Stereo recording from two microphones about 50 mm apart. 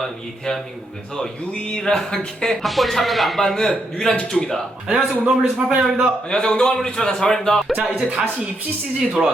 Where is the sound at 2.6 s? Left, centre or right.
Centre.